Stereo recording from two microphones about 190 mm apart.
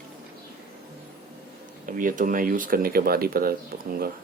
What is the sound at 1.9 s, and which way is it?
Speech, 45° right (ahead or behind).